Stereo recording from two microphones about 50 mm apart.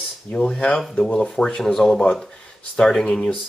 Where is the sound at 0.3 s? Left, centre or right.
Left.